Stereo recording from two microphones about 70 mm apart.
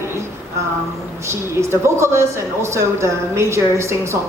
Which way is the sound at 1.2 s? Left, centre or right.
Right.